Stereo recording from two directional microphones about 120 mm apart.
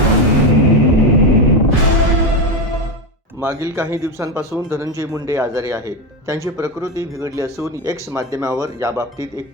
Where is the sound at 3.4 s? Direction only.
20° right (ahead or behind).